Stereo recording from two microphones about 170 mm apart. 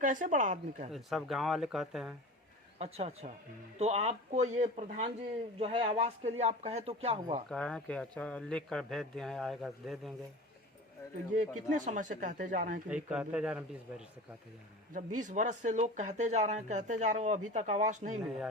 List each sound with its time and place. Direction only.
0.0 s speech: 50° right (ahead or behind)
0.9 s speech: centre (ahead or behind)
2.7 s speech: 35° right (ahead or behind)
7.5 s speech: 5° left (ahead or behind)
11.3 s speech: 45° right (ahead or behind)
12.9 s speech: 5° right (ahead or behind)
14.9 s speech: 45° right (ahead or behind)